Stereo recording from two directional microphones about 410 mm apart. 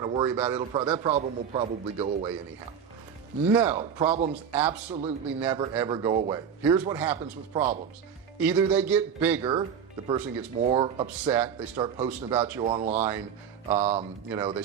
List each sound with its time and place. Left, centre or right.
0.0 s a man's voice: centre
3.4 s a man's voice: centre
3.7 s a man's voice: centre
4.5 s a man's voice: centre
10.6 s a man's voice: centre
11.1 s a man's voice: centre